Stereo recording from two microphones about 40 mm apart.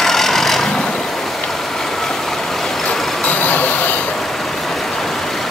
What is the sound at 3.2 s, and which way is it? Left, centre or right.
Vehicle, left.